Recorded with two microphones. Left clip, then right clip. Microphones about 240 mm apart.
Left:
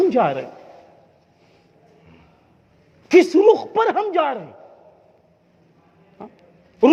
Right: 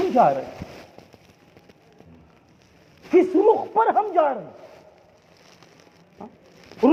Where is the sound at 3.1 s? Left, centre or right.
Left.